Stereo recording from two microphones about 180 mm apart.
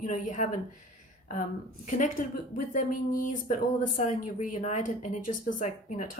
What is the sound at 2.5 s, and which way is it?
Speech, 50° left (ahead or behind).